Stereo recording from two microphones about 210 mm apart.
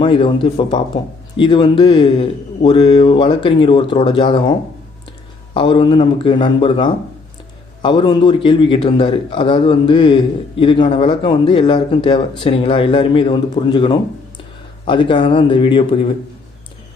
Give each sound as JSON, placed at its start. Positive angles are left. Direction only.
{"t": 0.0, "sound": "speech", "side_deg": 25}
{"t": 5.5, "sound": "speech", "side_deg": 20}